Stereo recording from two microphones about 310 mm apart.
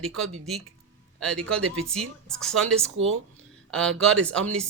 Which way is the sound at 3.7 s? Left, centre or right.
Centre.